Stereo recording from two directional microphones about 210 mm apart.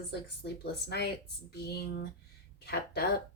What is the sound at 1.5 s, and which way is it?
Speech, 50° left (ahead or behind).